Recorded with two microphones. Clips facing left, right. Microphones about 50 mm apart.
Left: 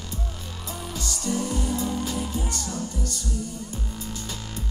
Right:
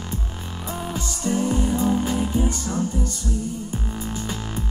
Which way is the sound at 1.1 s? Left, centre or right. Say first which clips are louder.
Right 4 dB; right.